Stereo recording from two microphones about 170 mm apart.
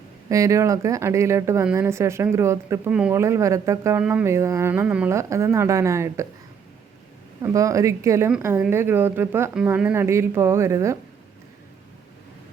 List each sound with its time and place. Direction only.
0.3 s speech: 20° right (ahead or behind)
7.4 s speech: 20° right (ahead or behind)